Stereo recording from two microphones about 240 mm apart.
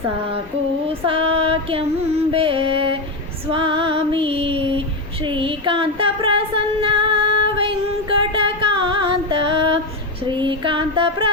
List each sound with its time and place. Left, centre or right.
0.9 s music: right
3.5 s female singing: right
5.2 s music: right
10.2 s female singing: centre